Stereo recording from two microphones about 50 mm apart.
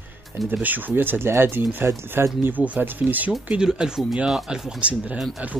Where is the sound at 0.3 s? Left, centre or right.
Right.